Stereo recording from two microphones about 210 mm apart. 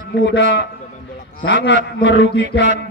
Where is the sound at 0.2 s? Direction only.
55° left (ahead or behind).